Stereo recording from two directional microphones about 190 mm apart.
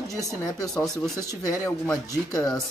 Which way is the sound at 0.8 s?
5° left (ahead or behind).